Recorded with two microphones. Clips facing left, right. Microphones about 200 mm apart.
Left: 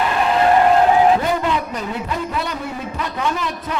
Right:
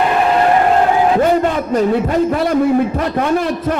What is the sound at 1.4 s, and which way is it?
A man's voice, 45° right (ahead or behind).